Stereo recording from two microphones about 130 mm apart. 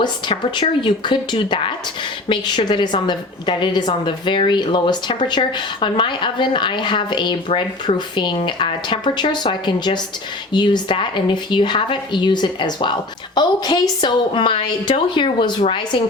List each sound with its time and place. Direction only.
0.0 s a woman's voice: 35° left (ahead or behind)